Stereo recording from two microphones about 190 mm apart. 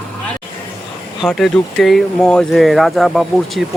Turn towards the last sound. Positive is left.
turn(degrees=0)  # may be behind; listen again after turning